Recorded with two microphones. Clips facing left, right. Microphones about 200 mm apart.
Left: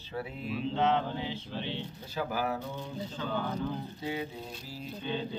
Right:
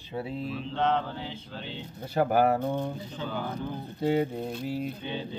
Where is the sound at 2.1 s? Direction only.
60° right (ahead or behind).